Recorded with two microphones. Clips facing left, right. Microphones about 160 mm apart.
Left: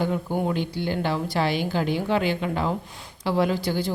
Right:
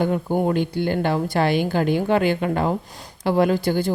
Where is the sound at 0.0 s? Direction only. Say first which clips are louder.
Right 4 dB; 50° right (ahead or behind).